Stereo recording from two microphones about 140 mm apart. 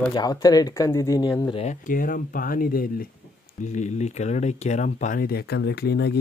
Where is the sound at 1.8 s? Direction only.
75° left (ahead or behind).